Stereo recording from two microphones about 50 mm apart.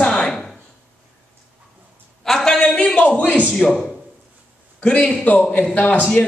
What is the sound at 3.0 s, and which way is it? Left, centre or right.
Speech, left.